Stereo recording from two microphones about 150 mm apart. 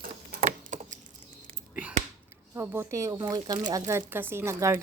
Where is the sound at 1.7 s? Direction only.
10° right (ahead or behind).